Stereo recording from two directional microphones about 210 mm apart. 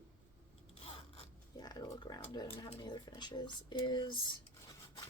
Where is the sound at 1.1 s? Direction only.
20° left (ahead or behind).